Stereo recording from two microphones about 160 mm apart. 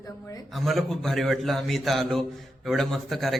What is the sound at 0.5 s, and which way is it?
A man's voice, centre (ahead or behind).